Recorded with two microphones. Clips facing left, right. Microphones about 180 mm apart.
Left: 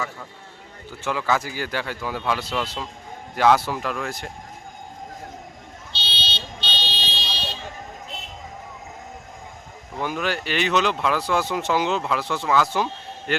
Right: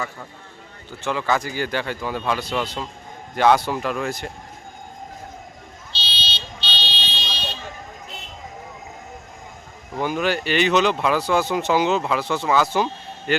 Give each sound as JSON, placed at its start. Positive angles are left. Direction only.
{"t": 0.9, "sound": "speech", "side_deg": 5}
{"t": 5.9, "sound": "car alarm", "side_deg": 60}
{"t": 10.0, "sound": "speech", "side_deg": 0}